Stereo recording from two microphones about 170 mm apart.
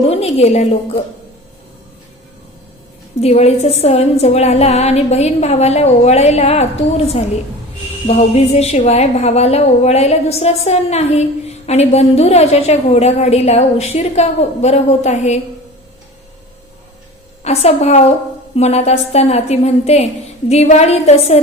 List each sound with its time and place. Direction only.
0.0 s a woman's voice: 35° left (ahead or behind)
3.2 s a woman's voice: 40° left (ahead or behind)
17.4 s a woman's voice: 40° left (ahead or behind)